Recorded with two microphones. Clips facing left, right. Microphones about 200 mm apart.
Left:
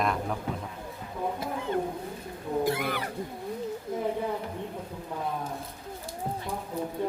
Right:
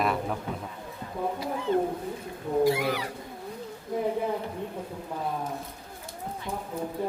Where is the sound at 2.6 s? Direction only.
55° left (ahead or behind).